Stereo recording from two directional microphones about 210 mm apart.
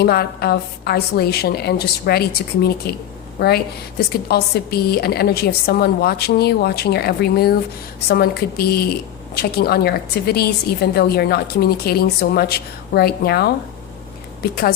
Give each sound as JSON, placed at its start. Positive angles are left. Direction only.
{"t": 0.0, "sound": "speech", "side_deg": 50}